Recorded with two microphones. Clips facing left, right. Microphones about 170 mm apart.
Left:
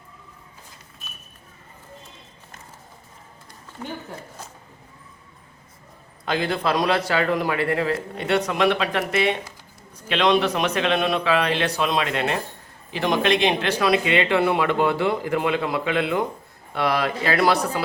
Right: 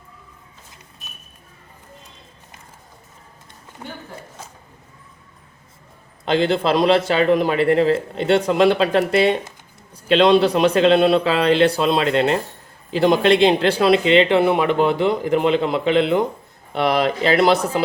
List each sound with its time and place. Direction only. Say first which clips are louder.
6.2 s a man's voice: right 5 dB; 25° right (ahead or behind)